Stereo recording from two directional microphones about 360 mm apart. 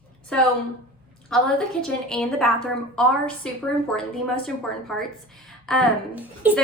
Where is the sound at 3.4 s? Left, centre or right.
Centre.